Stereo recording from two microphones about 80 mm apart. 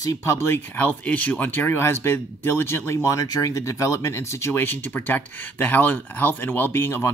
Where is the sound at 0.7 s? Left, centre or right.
Left.